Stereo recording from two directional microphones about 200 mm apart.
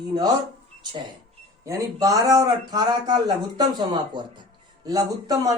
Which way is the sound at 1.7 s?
15° right (ahead or behind).